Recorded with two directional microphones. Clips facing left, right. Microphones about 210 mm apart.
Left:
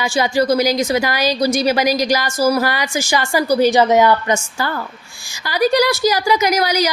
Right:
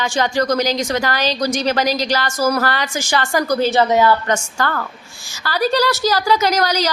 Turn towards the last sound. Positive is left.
turn(degrees=10)  # may be behind; listen again after turning